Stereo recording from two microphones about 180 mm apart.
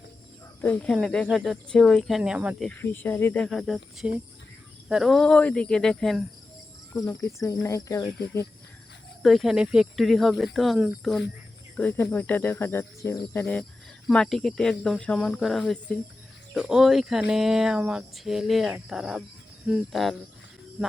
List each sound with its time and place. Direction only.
0.6 s speech: 5° left (ahead or behind)
2.6 s speech: 10° left (ahead or behind)
6.9 s speech: 15° left (ahead or behind)
9.2 s speech: centre (ahead or behind)
11.8 s speech: 10° left (ahead or behind)